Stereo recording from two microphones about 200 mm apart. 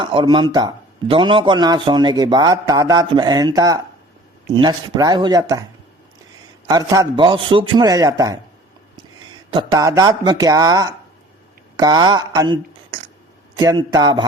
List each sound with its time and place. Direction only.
0.0 s a man's voice: 25° right (ahead or behind)
6.7 s a man's voice: 20° right (ahead or behind)
9.5 s a man's voice: 20° right (ahead or behind)